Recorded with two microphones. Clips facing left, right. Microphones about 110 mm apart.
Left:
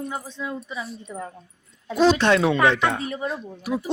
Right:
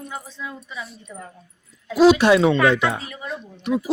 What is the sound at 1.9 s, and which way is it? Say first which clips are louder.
Speech: right 4 dB; 10° right (ahead or behind).